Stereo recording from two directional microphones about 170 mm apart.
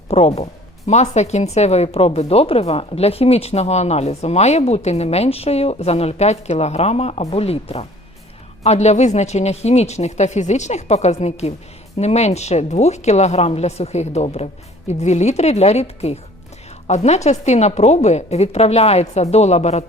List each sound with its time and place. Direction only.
0.1 s speech: 35° left (ahead or behind)